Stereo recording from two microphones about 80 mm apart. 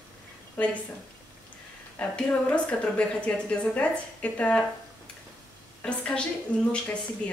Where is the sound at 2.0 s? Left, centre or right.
Centre.